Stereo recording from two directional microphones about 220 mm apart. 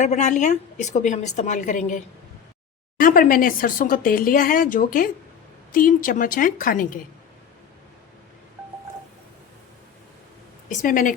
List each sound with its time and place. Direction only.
0.0 s speech: 30° left (ahead or behind)
10.7 s speech: 35° left (ahead or behind)